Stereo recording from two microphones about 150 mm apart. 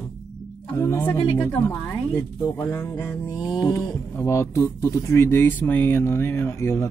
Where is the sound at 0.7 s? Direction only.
25° left (ahead or behind).